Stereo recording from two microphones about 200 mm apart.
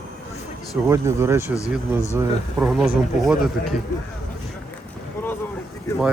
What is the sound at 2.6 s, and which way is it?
A man's voice, centre (ahead or behind).